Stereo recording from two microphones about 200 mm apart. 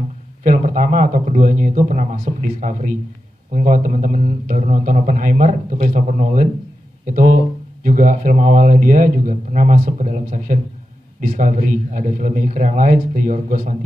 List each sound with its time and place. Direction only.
0.4 s speech: 40° right (ahead or behind)